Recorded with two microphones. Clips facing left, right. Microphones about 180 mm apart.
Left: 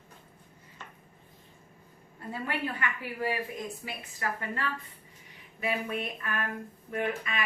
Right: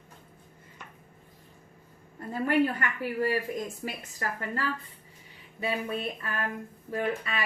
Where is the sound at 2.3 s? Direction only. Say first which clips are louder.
Right 9 dB; 45° right (ahead or behind).